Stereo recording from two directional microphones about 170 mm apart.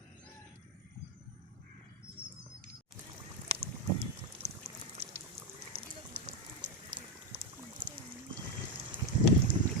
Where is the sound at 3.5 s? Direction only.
35° right (ahead or behind).